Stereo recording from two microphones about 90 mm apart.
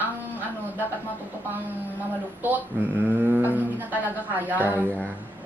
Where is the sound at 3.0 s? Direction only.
20° right (ahead or behind).